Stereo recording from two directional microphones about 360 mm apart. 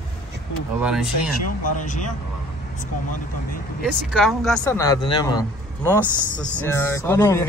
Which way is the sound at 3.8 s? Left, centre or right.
Centre.